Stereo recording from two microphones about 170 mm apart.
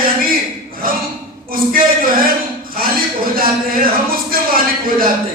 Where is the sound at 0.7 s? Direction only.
55° right (ahead or behind).